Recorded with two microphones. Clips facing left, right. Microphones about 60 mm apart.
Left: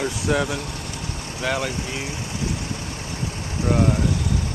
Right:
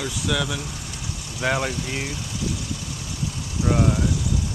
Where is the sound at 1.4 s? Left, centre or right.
Right.